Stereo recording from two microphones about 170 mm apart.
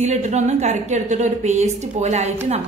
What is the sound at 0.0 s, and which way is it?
A woman's voice, 40° right (ahead or behind).